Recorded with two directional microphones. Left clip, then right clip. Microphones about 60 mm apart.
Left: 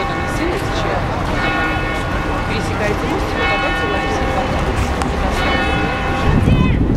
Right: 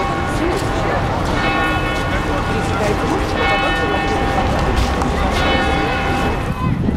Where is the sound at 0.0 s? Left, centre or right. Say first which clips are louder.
Even; left.